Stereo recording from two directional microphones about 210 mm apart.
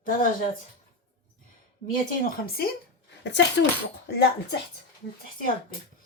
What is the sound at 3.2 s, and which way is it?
Speech, 55° left (ahead or behind).